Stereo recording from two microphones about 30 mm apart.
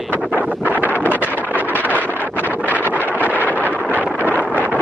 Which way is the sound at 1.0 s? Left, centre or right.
Left.